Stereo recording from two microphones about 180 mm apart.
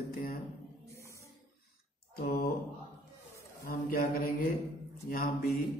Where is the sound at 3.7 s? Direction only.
55° left (ahead or behind).